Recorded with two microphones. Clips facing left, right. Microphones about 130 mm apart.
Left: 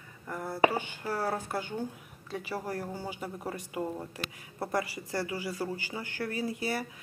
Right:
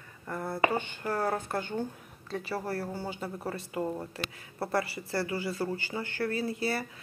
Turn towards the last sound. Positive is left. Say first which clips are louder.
# right 1 dB
turn(degrees=15)  # may be behind; listen again after turning